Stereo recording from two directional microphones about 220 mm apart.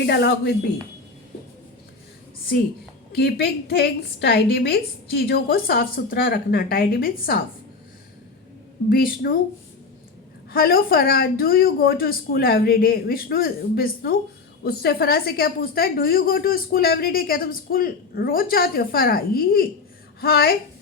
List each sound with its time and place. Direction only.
0.0 s a woman's voice: 50° left (ahead or behind)
3.1 s a woman's voice: 45° left (ahead or behind)
8.9 s a woman's voice: 40° left (ahead or behind)
10.5 s a woman's voice: 40° left (ahead or behind)